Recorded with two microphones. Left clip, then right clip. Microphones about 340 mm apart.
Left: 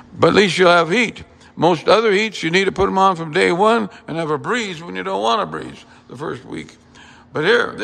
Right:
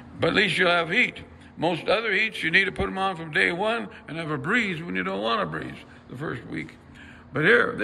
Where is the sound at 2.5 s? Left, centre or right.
Centre.